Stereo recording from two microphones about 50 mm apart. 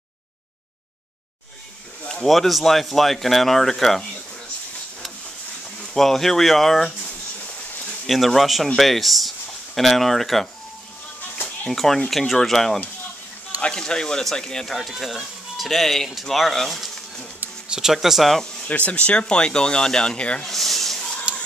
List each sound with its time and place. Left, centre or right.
2.2 s speech: centre
5.9 s speech: centre
8.1 s speech: centre
11.7 s speech: centre
13.6 s speech: centre
17.6 s speech: centre
18.3 s speech: centre
18.9 s speech: left
20.4 s a sound: centre